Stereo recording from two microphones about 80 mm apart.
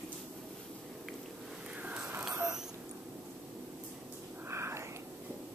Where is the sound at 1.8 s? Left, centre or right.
Centre.